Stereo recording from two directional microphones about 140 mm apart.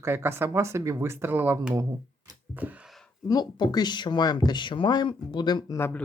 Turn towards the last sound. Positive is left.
turn(degrees=10)  # may be behind; listen again after turning